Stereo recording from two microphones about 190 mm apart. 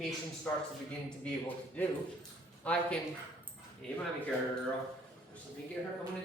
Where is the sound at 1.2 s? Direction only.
10° left (ahead or behind).